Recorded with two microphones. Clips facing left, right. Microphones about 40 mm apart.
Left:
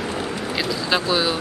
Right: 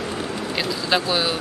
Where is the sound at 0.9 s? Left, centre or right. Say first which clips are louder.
Even; centre.